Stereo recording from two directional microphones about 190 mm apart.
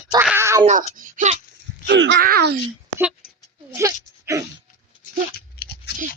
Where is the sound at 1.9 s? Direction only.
70° right (ahead or behind).